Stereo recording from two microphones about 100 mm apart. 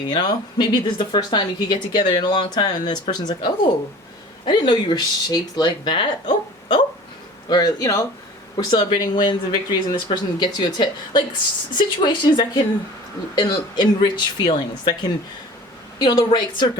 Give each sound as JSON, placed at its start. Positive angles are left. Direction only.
{"t": 0.1, "sound": "speech", "side_deg": 50}
{"t": 7.4, "sound": "speech", "side_deg": 45}
{"t": 8.5, "sound": "speech", "side_deg": 50}
{"t": 16.0, "sound": "speech", "side_deg": 45}